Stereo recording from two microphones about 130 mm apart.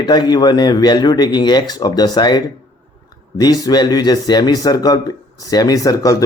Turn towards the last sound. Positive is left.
turn(degrees=25)  # may be behind; listen again after turning